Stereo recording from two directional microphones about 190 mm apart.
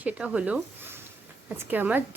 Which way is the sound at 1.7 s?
10° right (ahead or behind).